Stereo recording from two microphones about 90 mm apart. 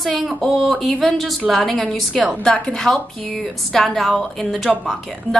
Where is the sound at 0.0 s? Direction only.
Centre (ahead or behind).